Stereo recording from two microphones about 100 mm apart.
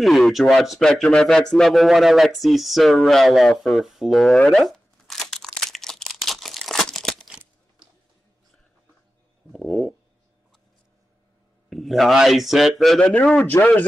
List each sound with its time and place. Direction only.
0.0 s speech: centre (ahead or behind)
4.4 s crumpling: 5° left (ahead or behind)
9.5 s a sound: centre (ahead or behind)
11.7 s speech: centre (ahead or behind)
13.5 s a man's voice: 25° left (ahead or behind)